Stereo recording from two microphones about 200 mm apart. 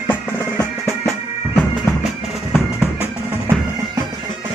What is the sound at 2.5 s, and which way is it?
Music, 10° right (ahead or behind).